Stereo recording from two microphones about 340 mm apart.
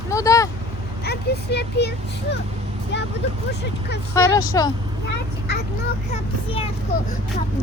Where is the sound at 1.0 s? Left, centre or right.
Left.